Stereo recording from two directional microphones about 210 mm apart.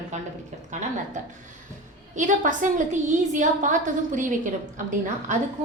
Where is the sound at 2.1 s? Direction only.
40° right (ahead or behind).